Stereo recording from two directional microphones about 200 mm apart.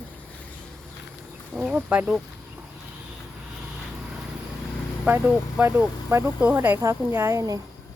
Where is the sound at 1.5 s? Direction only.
5° right (ahead or behind).